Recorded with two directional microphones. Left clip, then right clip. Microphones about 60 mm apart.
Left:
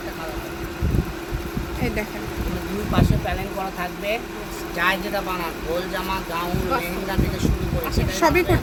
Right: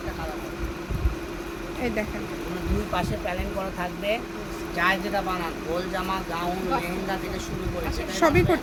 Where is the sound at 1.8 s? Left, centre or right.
Centre.